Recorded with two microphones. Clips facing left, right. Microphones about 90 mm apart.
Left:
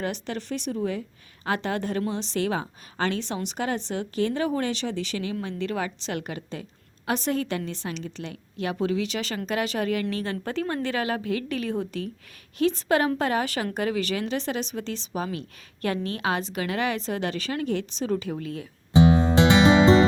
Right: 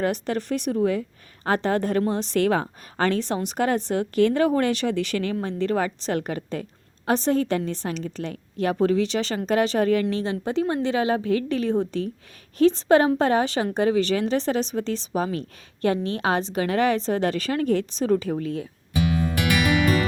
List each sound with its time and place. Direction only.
0.0 s a woman's voice: 45° right (ahead or behind)
1.5 s a woman's voice: 40° right (ahead or behind); by 5.4 s 55° right (ahead or behind)
5.4 s a woman's voice: 35° right (ahead or behind)
7.0 s a woman's voice: 35° right (ahead or behind)
18.9 s music: 25° left (ahead or behind)